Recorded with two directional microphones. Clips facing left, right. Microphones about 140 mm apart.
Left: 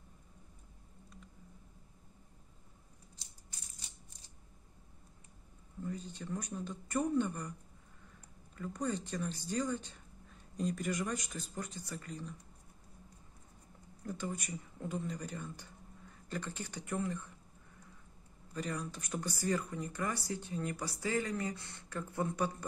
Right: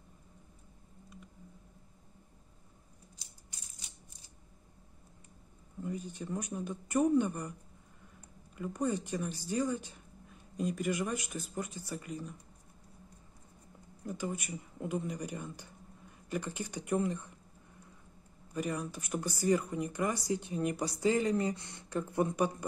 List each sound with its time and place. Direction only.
5.9 s speech: 15° right (ahead or behind)
8.5 s speech: 10° right (ahead or behind)
14.0 s speech: 10° right (ahead or behind)
18.5 s speech: 10° right (ahead or behind)